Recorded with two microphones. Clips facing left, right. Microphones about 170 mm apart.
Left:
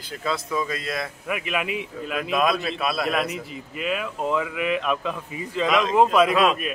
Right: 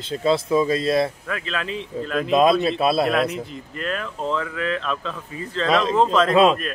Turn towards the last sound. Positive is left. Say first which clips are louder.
# right 5 dB
turn(degrees=-30)  # may be behind; listen again after turning